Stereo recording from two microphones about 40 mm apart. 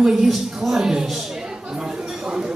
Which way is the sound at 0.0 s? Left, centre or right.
Centre.